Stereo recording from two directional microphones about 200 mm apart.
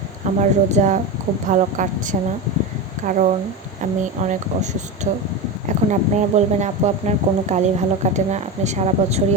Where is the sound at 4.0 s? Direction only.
35° right (ahead or behind).